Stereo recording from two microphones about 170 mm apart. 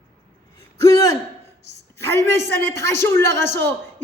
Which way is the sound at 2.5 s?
90° right.